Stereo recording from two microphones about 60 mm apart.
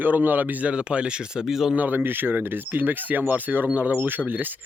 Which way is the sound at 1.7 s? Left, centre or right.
Right.